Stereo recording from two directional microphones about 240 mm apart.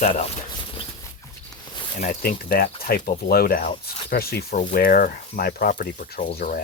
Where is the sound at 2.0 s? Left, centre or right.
Left.